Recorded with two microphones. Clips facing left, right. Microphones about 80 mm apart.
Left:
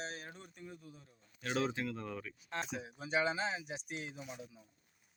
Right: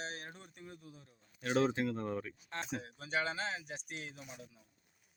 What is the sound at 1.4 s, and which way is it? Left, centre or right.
Speech, right.